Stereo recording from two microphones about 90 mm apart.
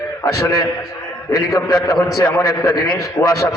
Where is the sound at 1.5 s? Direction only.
40° left (ahead or behind).